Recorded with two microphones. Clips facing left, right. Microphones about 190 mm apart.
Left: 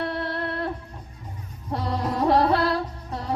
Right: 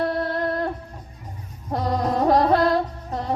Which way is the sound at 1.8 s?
35° right (ahead or behind).